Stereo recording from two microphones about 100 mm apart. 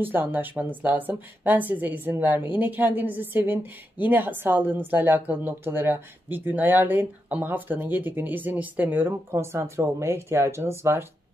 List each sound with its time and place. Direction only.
0.0 s speech: 20° right (ahead or behind)